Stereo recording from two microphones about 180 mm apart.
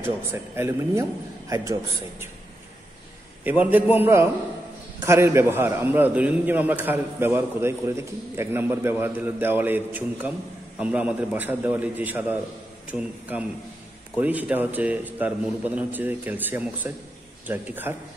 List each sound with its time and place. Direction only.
0.2 s a man's voice: 15° right (ahead or behind)
3.4 s a man's voice: 10° right (ahead or behind)